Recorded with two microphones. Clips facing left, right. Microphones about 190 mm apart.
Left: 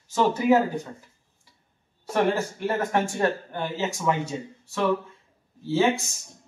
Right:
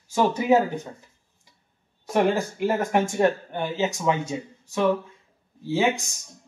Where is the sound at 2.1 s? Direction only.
15° right (ahead or behind).